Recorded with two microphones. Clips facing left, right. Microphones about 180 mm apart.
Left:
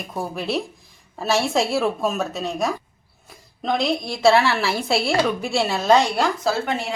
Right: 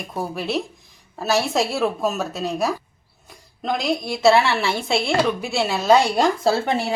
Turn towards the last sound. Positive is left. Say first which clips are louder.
# right 3 dB
turn(degrees=-30)  # may be behind; listen again after turning